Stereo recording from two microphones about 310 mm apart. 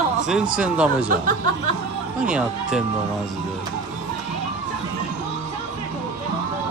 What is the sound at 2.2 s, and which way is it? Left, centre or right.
Speech, centre.